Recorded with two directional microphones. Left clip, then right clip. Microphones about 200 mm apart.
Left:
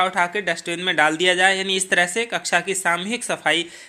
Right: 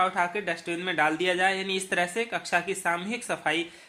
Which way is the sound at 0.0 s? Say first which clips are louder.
Left 6 dB; 30° left (ahead or behind).